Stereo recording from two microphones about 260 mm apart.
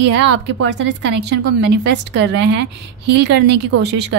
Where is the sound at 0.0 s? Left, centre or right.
Right.